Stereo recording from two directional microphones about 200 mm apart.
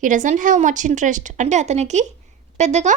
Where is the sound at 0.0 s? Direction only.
40° right (ahead or behind).